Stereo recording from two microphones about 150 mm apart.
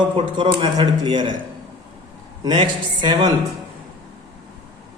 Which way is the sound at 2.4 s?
30° right (ahead or behind).